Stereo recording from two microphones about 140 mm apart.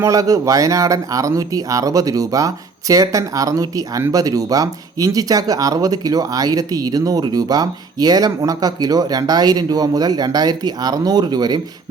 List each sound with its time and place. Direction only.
0.0 s speech: 25° right (ahead or behind)